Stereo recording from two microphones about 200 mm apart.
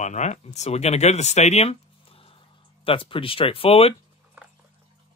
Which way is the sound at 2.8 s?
25° left (ahead or behind).